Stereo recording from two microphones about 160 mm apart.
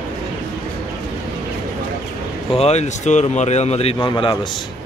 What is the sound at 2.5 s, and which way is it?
Speech, 45° left (ahead or behind).